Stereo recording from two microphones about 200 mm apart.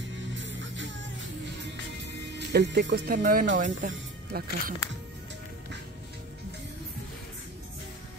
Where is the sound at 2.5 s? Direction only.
55° right (ahead or behind).